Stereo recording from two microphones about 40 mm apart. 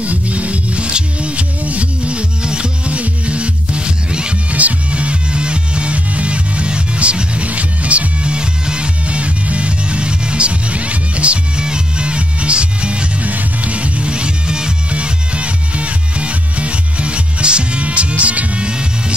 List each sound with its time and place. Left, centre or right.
0.0 s music: right
4.5 s music: right
18.6 s music: right